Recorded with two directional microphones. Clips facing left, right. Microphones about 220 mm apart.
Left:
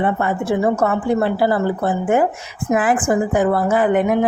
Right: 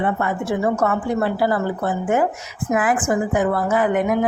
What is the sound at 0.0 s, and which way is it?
A woman's voice, 30° left (ahead or behind).